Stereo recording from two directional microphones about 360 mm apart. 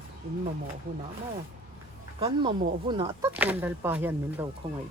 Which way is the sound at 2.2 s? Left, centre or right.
Centre.